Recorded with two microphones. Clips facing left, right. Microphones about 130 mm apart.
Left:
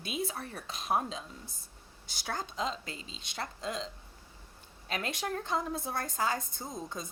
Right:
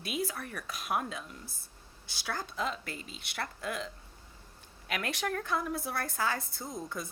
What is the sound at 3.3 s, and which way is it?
A woman's voice, 20° left (ahead or behind).